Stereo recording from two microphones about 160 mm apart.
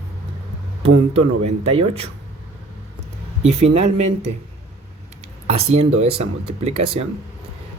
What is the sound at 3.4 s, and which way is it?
Speech, 45° right (ahead or behind).